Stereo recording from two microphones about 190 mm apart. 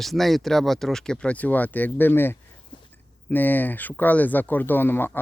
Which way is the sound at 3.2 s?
10° left (ahead or behind).